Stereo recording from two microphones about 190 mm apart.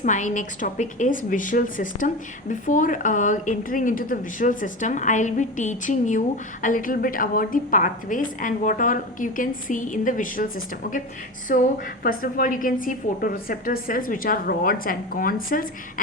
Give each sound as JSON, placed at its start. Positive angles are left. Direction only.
{"t": 0.0, "sound": "a woman's voice", "side_deg": 40}
{"t": 11.5, "sound": "a woman's voice", "side_deg": 50}